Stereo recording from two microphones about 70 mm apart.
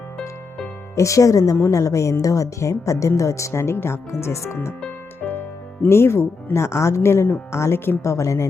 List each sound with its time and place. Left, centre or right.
0.9 s a woman's voice: left
5.9 s a woman's voice: left